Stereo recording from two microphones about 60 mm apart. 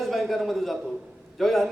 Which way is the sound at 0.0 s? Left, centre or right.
Centre.